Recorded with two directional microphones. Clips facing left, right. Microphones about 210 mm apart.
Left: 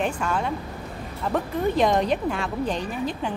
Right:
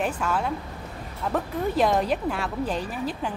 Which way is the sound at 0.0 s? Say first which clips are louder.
Left 1 dB; 5° right (ahead or behind).